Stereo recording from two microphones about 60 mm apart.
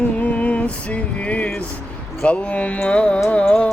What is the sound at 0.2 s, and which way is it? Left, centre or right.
Music, left.